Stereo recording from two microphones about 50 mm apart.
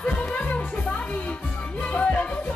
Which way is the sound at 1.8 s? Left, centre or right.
Left.